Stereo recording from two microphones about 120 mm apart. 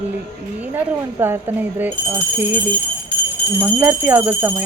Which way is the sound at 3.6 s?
15° right (ahead or behind).